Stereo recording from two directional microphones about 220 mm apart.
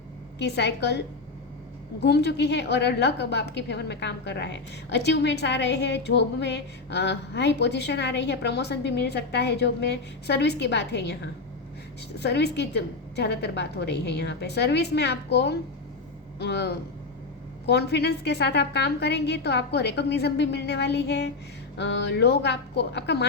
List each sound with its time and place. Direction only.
0.3 s a woman's voice: 50° left (ahead or behind)
12.2 s a woman's voice: 50° left (ahead or behind)